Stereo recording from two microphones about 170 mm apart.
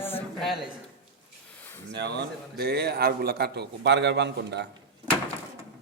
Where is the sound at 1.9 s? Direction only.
85° right.